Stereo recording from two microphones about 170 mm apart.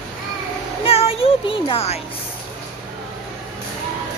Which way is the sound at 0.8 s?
35° left (ahead or behind).